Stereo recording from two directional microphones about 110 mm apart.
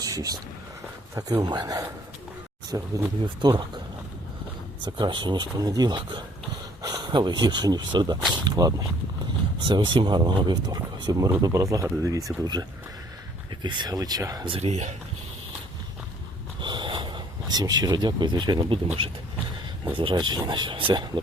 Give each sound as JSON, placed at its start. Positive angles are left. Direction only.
{"t": 0.0, "sound": "a sound", "side_deg": -35}
{"t": 1.4, "sound": "speech", "side_deg": -35}
{"t": 4.9, "sound": "speech", "side_deg": -45}
{"t": 9.6, "sound": "speech", "side_deg": -45}
{"t": 14.4, "sound": "speech", "side_deg": -55}
{"t": 14.7, "sound": "speech", "side_deg": -90}
{"t": 16.6, "sound": "speech", "side_deg": -45}